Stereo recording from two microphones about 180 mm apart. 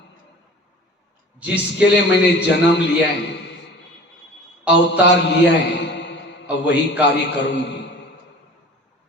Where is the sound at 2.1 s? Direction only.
75° left (ahead or behind).